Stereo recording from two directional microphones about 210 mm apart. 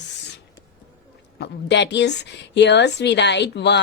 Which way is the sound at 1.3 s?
55° left (ahead or behind).